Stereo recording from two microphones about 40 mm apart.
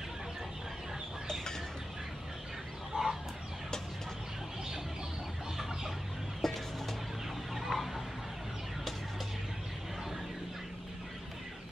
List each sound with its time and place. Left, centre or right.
2.9 s chicken: centre
6.4 s music: centre
7.7 s fowl: centre